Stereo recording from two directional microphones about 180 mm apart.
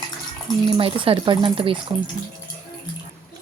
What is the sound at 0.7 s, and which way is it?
Speech, 30° right (ahead or behind).